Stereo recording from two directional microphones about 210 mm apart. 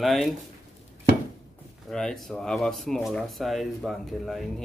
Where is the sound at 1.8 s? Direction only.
Centre (ahead or behind).